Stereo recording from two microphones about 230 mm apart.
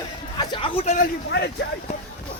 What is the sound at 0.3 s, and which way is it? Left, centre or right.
Speech, left.